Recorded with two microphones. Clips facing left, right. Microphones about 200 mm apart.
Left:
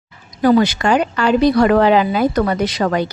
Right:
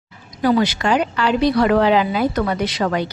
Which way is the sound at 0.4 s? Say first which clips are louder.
Left 4 dB; 45° left (ahead or behind).